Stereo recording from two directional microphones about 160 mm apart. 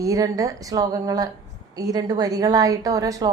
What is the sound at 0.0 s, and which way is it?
A woman's voice, 20° right (ahead or behind).